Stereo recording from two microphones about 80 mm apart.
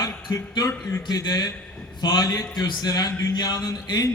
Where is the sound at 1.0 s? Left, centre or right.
Left.